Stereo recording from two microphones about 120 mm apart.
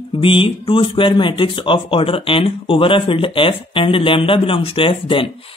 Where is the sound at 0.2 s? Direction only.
45° left (ahead or behind).